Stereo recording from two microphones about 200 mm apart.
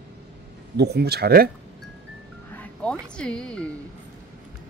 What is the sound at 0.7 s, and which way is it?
Speech, 55° right (ahead or behind).